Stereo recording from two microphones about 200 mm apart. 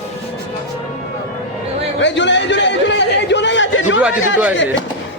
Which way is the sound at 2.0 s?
65° left (ahead or behind).